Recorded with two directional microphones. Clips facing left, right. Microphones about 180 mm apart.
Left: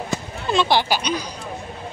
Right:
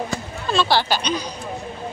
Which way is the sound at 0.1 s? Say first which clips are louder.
Left 1 dB; 15° left (ahead or behind).